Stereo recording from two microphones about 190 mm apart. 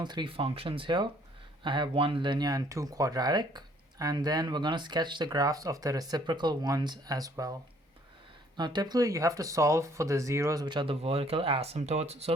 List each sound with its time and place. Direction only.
0.0 s speech: 25° right (ahead or behind)
8.5 s speech: 20° right (ahead or behind)